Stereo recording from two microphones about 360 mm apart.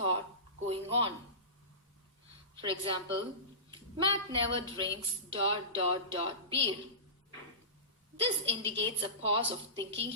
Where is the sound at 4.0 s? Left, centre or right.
Centre.